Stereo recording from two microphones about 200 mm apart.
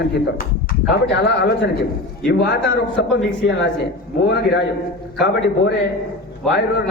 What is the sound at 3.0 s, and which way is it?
Speech, 60° left (ahead or behind).